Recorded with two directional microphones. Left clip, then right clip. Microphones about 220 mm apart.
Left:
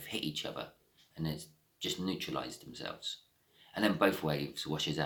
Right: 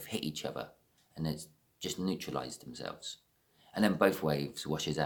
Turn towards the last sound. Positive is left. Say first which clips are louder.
# right 1 dB
turn(degrees=-50)  # may be behind; listen again after turning